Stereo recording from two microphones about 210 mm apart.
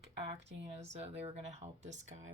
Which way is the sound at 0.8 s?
30° right (ahead or behind).